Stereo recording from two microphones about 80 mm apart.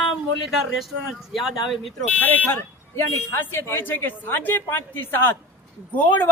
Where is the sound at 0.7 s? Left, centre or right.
Centre.